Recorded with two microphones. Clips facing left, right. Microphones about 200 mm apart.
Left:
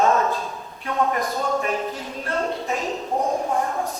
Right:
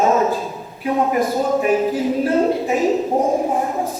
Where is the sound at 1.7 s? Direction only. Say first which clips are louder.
Right 11 dB; 5° right (ahead or behind).